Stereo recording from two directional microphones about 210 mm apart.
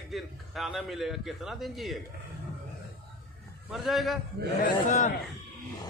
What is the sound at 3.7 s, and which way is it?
Speech, centre (ahead or behind).